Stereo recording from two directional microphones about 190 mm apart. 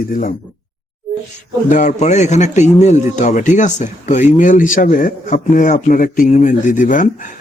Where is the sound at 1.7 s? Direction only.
40° left (ahead or behind).